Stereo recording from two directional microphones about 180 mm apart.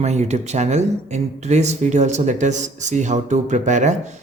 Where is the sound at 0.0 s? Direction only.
40° right (ahead or behind).